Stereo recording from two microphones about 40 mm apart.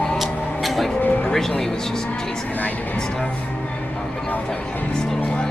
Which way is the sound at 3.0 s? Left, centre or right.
Left.